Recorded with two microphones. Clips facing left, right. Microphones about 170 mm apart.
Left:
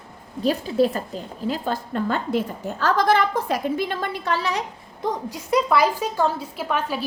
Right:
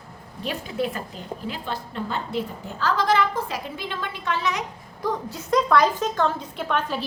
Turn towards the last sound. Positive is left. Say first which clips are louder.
# left 1 dB
turn(degrees=5)  # may be behind; listen again after turning